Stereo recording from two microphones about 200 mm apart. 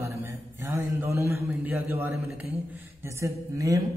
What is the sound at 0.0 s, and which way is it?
A man's voice, 15° right (ahead or behind).